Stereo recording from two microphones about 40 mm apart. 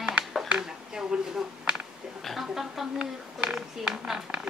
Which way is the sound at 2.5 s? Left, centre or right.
Centre.